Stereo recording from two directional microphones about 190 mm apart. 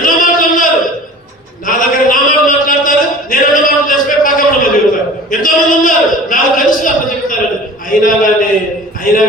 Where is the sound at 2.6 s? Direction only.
45° left (ahead or behind).